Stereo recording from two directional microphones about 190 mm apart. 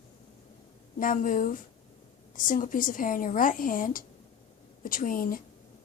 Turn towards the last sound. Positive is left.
turn(degrees=45)  # may be behind; listen again after turning